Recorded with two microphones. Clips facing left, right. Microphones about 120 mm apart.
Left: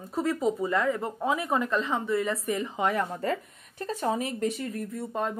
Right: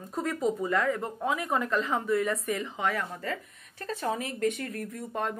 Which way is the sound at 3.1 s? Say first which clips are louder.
Left 5 dB; 30° left (ahead or behind).